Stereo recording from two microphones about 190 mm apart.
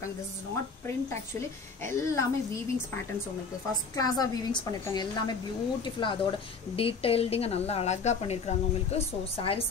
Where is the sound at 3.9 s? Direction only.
20° left (ahead or behind).